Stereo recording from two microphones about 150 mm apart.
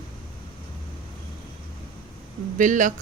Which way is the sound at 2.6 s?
60° right (ahead or behind).